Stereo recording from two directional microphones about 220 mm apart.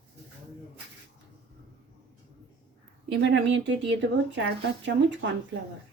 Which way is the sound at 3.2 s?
55° right (ahead or behind).